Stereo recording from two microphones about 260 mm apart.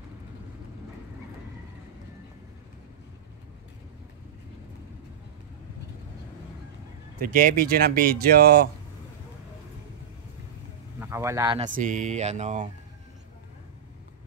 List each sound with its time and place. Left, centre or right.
7.2 s speech: right
11.0 s a man's voice: centre
11.7 s speech: right